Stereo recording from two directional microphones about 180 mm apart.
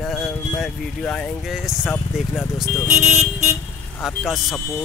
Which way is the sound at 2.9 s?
5° right (ahead or behind).